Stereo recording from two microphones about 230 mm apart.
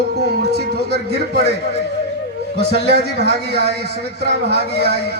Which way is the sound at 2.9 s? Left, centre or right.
Right.